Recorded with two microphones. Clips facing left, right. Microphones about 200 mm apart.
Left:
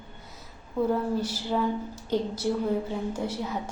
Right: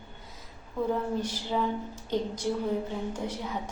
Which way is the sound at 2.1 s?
5° left (ahead or behind).